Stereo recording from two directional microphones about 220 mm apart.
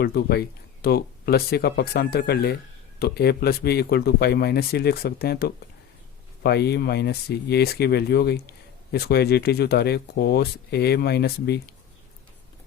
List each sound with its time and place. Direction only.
0.0 s speech: 45° left (ahead or behind)